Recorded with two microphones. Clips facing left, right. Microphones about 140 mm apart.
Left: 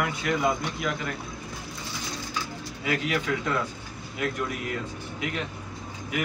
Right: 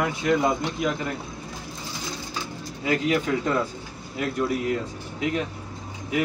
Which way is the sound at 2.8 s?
30° right (ahead or behind).